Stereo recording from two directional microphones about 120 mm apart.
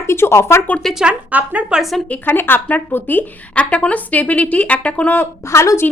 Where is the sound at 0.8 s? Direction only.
10° right (ahead or behind).